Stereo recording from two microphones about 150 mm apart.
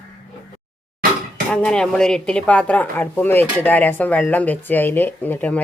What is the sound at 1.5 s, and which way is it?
Speech, 5° left (ahead or behind).